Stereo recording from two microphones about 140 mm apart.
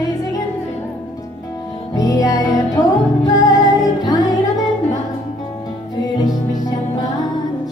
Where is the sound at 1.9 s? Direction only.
25° left (ahead or behind).